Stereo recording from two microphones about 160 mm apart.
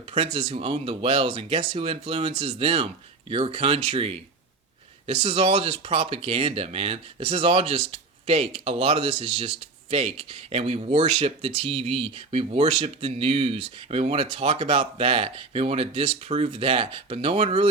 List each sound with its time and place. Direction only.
0.1 s speech: 35° right (ahead or behind)